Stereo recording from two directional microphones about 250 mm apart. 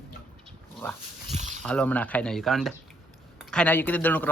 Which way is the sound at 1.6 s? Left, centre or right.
Centre.